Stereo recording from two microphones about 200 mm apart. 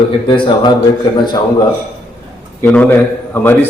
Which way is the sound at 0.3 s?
25° left (ahead or behind).